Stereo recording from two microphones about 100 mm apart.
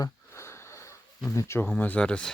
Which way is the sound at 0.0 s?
30° left (ahead or behind).